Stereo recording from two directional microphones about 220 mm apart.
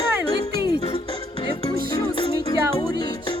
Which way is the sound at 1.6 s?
20° left (ahead or behind).